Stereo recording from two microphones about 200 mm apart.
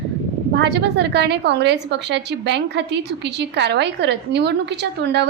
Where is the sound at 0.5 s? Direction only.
60° right (ahead or behind).